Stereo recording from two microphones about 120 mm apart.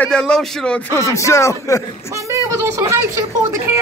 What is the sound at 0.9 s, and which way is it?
Speech, 25° left (ahead or behind).